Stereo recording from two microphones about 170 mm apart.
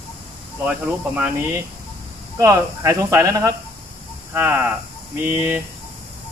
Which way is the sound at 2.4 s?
15° right (ahead or behind).